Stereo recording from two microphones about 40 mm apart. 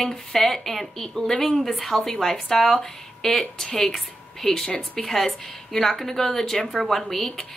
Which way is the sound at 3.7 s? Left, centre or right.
Left.